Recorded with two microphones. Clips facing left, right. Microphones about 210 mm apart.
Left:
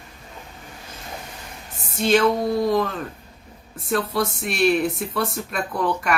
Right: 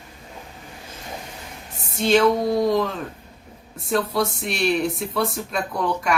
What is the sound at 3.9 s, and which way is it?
Speech, centre (ahead or behind).